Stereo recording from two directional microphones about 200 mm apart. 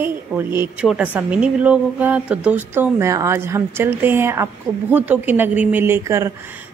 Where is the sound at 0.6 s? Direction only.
5° right (ahead or behind).